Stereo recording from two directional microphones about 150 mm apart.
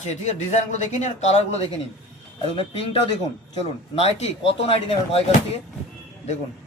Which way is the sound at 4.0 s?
40° left (ahead or behind).